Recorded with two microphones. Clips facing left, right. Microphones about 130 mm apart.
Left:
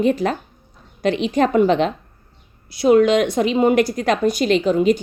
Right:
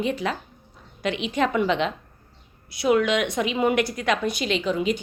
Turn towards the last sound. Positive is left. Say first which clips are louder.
# left 8 dB
turn(degrees=45)  # may be behind; listen again after turning